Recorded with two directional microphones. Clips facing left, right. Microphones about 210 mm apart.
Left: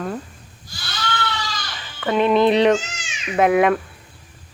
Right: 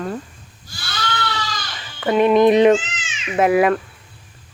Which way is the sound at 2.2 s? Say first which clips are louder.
Right 3 dB; 15° right (ahead or behind).